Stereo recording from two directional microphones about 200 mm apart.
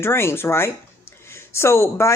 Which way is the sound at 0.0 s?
10° left (ahead or behind).